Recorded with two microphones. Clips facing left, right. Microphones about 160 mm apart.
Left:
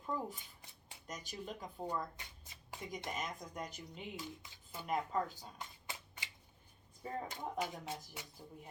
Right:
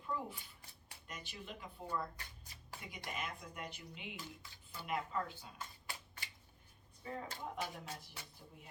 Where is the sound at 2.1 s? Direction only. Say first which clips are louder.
Even; 20° left (ahead or behind).